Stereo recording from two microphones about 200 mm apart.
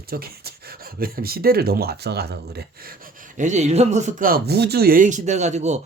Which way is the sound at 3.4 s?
35° right (ahead or behind).